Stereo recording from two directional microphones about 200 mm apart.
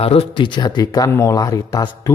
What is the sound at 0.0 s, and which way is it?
Speech, 30° left (ahead or behind).